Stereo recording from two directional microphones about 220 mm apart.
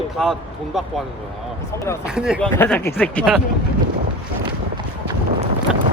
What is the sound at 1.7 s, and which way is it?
Speech, 10° left (ahead or behind).